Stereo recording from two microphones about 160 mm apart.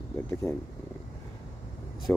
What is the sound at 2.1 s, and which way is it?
Speech, 10° left (ahead or behind).